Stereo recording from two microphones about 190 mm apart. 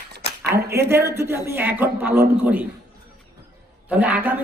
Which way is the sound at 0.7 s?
10° right (ahead or behind).